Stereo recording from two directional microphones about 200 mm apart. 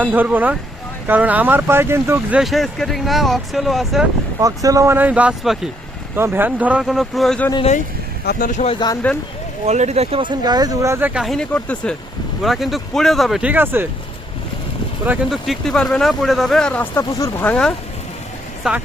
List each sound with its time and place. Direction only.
0.0 s speech: 10° right (ahead or behind)
2.4 s speech: centre (ahead or behind)
4.4 s speech: 15° right (ahead or behind); by 7.5 s 5° left (ahead or behind)
7.5 s speech: 30° left (ahead or behind)
8.3 s speech: 40° left (ahead or behind); by 9.0 s 25° left (ahead or behind)
9.6 s speech: 35° right (ahead or behind); by 13.8 s 10° right (ahead or behind)
15.0 s speech: 5° right (ahead or behind)